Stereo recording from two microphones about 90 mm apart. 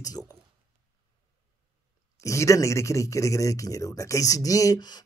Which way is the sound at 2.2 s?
35° left (ahead or behind).